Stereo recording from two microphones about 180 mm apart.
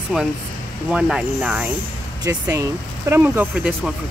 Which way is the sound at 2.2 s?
15° right (ahead or behind).